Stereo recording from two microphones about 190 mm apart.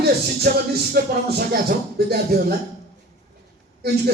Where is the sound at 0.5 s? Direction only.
55° right (ahead or behind).